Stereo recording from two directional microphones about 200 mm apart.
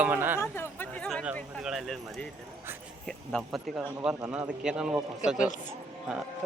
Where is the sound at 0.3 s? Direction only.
10° left (ahead or behind); by 5.5 s 5° right (ahead or behind).